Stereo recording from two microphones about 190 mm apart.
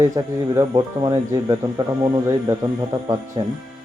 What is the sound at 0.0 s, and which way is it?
Speech, 15° right (ahead or behind).